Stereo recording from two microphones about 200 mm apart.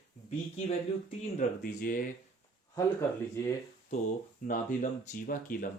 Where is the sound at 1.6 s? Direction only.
40° left (ahead or behind).